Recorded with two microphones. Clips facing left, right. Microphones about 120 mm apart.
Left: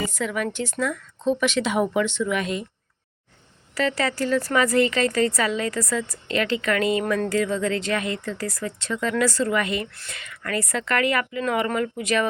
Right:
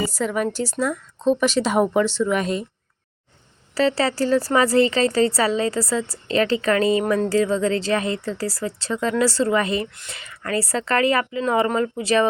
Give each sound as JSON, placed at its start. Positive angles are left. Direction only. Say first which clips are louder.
{"t": 0.1, "sound": "speech", "louder": "right 4 dB", "side_deg": -40}
{"t": 3.8, "sound": "a woman's voice", "louder": "right 4 dB", "side_deg": -30}